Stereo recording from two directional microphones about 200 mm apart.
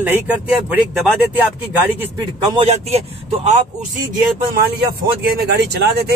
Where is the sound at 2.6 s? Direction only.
35° right (ahead or behind).